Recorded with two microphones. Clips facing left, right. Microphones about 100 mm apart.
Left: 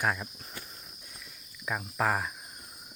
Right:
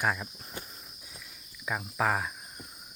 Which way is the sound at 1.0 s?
Centre (ahead or behind).